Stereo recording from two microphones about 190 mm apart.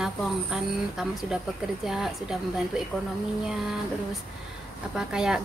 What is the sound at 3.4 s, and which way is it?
Speech, centre (ahead or behind).